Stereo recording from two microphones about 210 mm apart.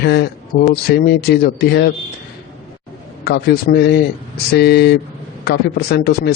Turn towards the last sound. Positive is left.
turn(degrees=50)  # may be behind; listen again after turning